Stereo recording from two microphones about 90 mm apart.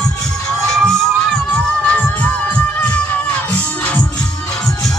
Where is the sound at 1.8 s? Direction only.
15° left (ahead or behind).